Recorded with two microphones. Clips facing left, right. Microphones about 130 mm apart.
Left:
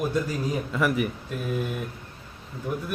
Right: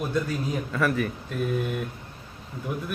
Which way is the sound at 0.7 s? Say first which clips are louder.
Even; 15° left (ahead or behind).